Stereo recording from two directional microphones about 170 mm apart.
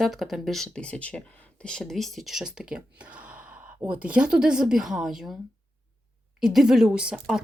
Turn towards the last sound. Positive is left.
turn(degrees=-5)  # may be behind; listen again after turning